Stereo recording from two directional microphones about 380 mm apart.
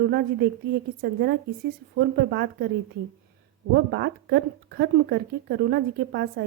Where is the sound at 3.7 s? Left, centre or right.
Right.